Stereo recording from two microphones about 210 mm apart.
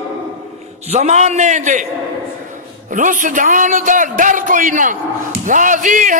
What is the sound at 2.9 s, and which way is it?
A man's voice, 40° right (ahead or behind).